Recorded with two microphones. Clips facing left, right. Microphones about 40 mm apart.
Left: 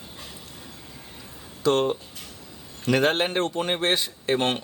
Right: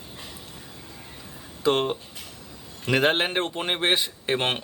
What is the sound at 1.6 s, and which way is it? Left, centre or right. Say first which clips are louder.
A man's voice: left 1 dB; centre.